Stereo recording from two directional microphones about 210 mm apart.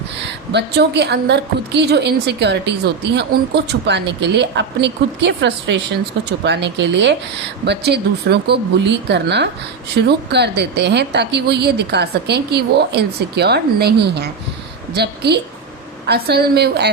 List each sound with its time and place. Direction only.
0.5 s a woman's voice: 50° right (ahead or behind)